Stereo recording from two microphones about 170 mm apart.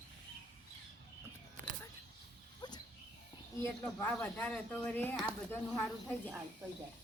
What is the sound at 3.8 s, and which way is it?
Speech, 5° left (ahead or behind).